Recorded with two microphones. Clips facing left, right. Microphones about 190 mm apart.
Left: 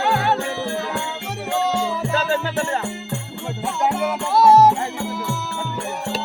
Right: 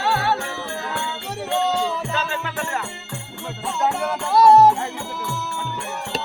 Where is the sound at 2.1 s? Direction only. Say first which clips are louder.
Left 5 dB; 35° left (ahead or behind).